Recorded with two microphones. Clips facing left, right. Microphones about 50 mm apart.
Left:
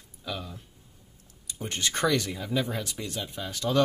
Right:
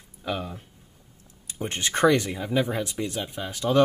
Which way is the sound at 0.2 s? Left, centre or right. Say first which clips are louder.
Right 6 dB; right.